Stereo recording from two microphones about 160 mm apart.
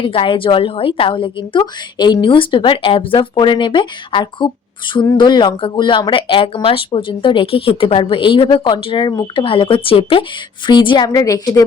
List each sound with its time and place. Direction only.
0.0 s a woman's voice: 35° left (ahead or behind)